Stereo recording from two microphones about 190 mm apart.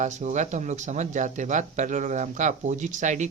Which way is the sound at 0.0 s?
40° right (ahead or behind).